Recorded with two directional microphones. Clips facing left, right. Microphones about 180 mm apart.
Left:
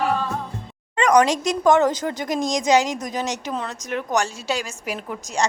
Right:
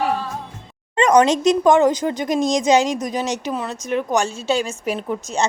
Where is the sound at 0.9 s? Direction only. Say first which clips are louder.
Right 3 dB; 25° right (ahead or behind).